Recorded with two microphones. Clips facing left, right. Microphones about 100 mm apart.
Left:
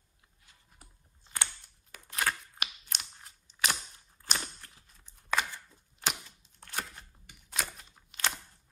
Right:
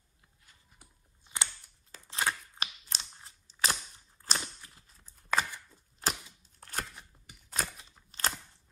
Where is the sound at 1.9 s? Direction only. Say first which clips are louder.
Even; 25° right (ahead or behind).